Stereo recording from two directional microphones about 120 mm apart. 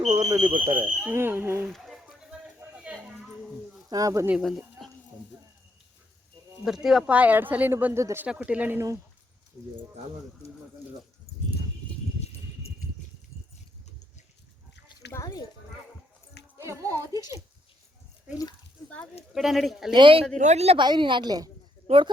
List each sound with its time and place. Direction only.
0.1 s a woman's voice: 35° right (ahead or behind)
0.7 s speech: 15° right (ahead or behind)
1.6 s a sound: centre (ahead or behind)
3.8 s a woman's voice: 30° right (ahead or behind)
4.4 s speech: centre (ahead or behind)
6.8 s speech: 5° right (ahead or behind)
15.1 s speech: 30° left (ahead or behind)
16.6 s music: 25° right (ahead or behind)
19.3 s a man's voice: centre (ahead or behind)
19.9 s speech: 45° right (ahead or behind)
20.4 s a woman's voice: 65° right (ahead or behind)
20.7 s a woman's voice: 40° right (ahead or behind)
21.8 s speech: 45° right (ahead or behind)